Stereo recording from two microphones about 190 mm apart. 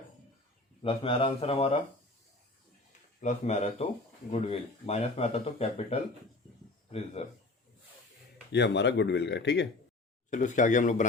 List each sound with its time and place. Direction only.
0.8 s speech: 30° left (ahead or behind)
3.2 s speech: 40° left (ahead or behind)
8.5 s speech: 65° left (ahead or behind)
10.2 s speech: 40° left (ahead or behind)